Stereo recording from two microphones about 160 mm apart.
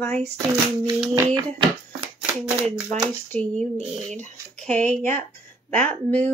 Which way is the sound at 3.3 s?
5° left (ahead or behind).